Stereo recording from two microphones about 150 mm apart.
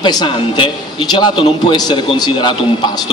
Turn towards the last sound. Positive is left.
turn(degrees=30)  # may be behind; listen again after turning